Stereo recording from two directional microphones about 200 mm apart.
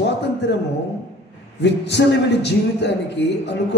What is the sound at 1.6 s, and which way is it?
A man's voice, 60° left (ahead or behind).